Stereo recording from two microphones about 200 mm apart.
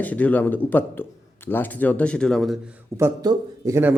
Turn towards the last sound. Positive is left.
turn(degrees=-10)  # may be behind; listen again after turning